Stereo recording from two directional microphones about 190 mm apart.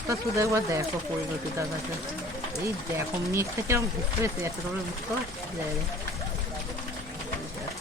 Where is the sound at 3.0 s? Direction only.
15° right (ahead or behind).